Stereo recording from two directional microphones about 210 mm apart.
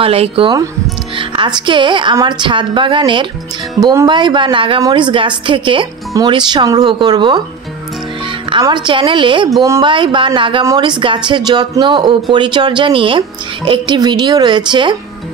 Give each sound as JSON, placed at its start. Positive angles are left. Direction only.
{"t": 0.0, "sound": "a woman's voice", "side_deg": -25}